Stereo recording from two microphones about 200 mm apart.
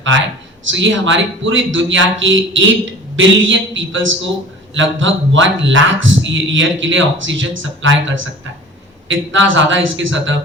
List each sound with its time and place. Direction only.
0.1 s a man's voice: 70° right (ahead or behind)